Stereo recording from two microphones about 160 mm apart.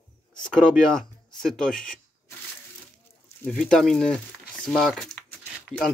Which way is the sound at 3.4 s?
5° left (ahead or behind).